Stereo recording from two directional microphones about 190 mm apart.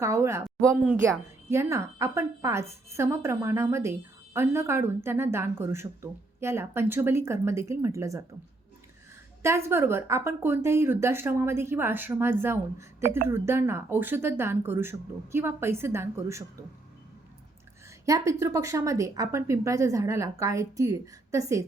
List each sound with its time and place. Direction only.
0.0 s speech: 15° right (ahead or behind)
9.4 s speech: 15° right (ahead or behind)
18.0 s speech: 15° right (ahead or behind)